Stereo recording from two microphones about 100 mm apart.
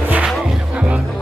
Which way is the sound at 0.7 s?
10° right (ahead or behind).